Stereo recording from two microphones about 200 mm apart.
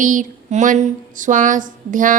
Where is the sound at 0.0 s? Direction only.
40° right (ahead or behind).